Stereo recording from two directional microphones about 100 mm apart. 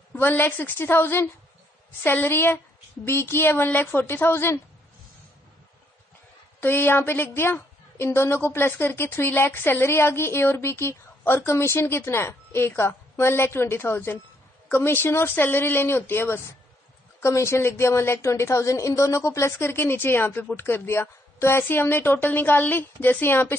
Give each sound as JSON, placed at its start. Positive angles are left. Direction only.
{"t": 0.1, "sound": "a woman's voice", "side_deg": 20}
{"t": 6.6, "sound": "a woman's voice", "side_deg": 20}